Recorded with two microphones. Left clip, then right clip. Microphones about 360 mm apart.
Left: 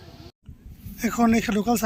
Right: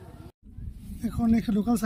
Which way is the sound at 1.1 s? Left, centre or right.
Centre.